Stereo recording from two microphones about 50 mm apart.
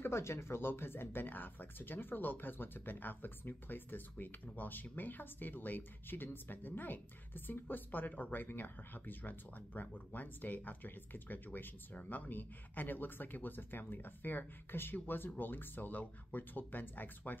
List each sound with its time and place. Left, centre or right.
0.0 s speech: left